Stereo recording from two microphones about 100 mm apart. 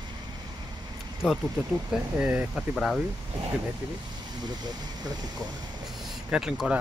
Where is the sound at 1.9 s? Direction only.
10° right (ahead or behind).